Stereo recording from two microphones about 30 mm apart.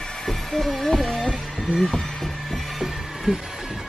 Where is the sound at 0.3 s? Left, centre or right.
Centre.